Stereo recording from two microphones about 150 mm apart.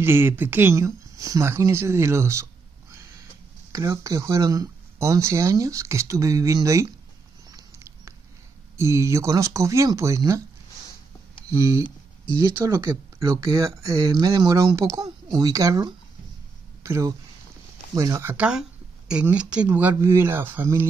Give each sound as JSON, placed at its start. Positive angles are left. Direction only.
{"t": 0.0, "sound": "speech", "side_deg": -15}
{"t": 3.7, "sound": "speech", "side_deg": -20}
{"t": 7.4, "sound": "a sound", "side_deg": -20}
{"t": 8.7, "sound": "speech", "side_deg": -20}
{"t": 11.4, "sound": "speech", "side_deg": -20}
{"t": 18.3, "sound": "speech", "side_deg": -5}